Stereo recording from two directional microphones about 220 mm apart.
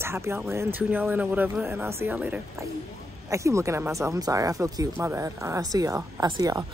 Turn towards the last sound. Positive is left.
turn(degrees=-15)  # may be behind; listen again after turning